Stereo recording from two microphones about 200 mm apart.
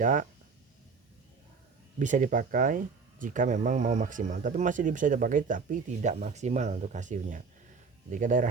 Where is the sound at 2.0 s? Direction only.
40° right (ahead or behind).